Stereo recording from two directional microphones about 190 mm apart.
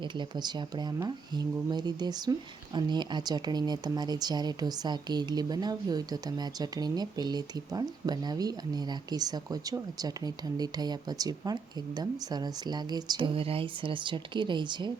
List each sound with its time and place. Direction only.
0.0 s speech: 25° right (ahead or behind)